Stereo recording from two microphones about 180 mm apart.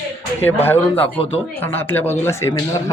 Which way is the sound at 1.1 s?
30° left (ahead or behind).